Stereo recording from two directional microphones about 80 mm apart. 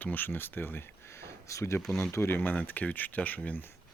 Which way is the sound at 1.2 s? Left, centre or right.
Left.